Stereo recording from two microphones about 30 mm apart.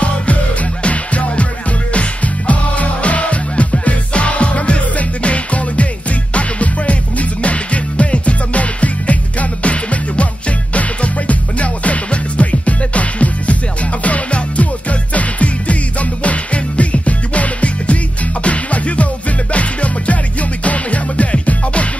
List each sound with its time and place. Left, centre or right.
0.8 s music: left